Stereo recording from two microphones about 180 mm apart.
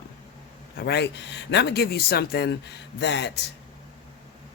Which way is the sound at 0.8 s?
70° left (ahead or behind).